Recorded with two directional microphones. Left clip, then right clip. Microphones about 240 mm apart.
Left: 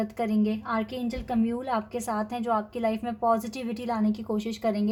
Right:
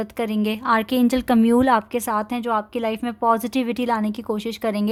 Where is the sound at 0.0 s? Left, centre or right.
Right.